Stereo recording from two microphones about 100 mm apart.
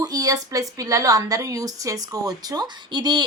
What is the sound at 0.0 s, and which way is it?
A woman's voice, 40° right (ahead or behind).